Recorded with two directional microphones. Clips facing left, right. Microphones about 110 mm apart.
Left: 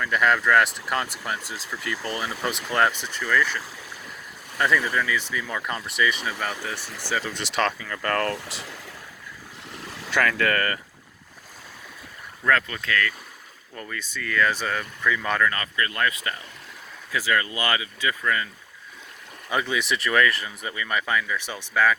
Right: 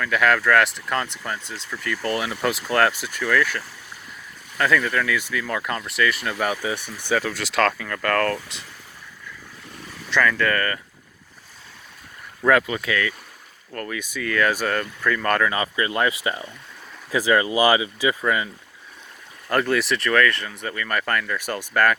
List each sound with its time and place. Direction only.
0.0 s speech: centre (ahead or behind)
4.5 s speech: 10° left (ahead or behind); by 6.7 s 10° right (ahead or behind)
6.7 s speech: 20° right (ahead or behind)
7.1 s speech: 5° right (ahead or behind)
10.5 s speech: 25° left (ahead or behind)
12.5 s speech: 10° right (ahead or behind)
13.7 s speech: centre (ahead or behind)
15.4 s speech: 20° right (ahead or behind)
19.5 s speech: centre (ahead or behind)
20.1 s speech: 15° left (ahead or behind); by 21.9 s 5° right (ahead or behind)